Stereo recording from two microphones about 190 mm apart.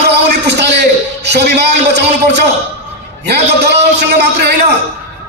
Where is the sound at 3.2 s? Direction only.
60° right (ahead or behind).